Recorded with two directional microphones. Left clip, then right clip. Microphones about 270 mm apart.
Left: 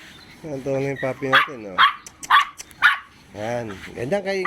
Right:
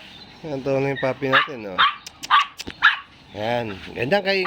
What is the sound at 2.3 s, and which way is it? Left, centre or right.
Dog, left.